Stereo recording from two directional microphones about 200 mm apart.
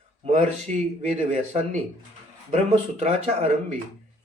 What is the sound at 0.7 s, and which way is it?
Speech, 35° right (ahead or behind).